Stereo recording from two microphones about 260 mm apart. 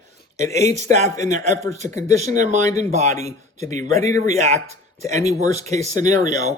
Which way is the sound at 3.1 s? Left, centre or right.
Centre.